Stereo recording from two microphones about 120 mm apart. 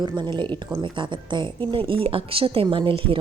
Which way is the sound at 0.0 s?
40° right (ahead or behind).